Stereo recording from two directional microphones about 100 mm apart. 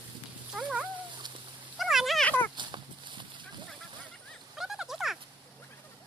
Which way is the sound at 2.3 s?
20° left (ahead or behind).